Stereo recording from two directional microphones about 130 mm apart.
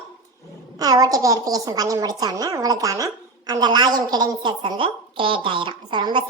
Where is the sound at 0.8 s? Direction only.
30° right (ahead or behind).